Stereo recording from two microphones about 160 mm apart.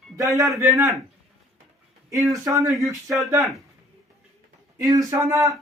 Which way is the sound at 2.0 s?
20° right (ahead or behind).